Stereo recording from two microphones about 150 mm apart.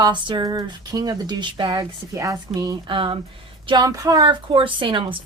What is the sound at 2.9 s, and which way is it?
A woman's voice, 35° right (ahead or behind).